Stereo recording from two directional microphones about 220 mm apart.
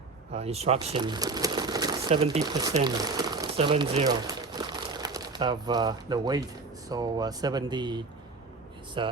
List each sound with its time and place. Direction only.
0.3 s speech: 30° right (ahead or behind)